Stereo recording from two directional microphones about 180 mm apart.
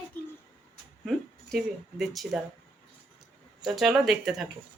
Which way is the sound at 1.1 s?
Centre (ahead or behind).